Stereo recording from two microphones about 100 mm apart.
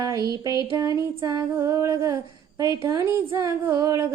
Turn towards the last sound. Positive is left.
turn(degrees=-30)  # may be behind; listen again after turning